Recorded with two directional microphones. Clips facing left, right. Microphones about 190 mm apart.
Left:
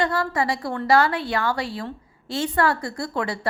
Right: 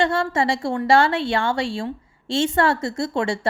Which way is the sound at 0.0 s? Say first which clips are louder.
Right 3 dB; 25° right (ahead or behind).